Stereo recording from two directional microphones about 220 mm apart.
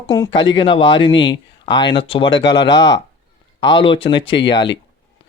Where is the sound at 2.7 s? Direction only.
55° left (ahead or behind).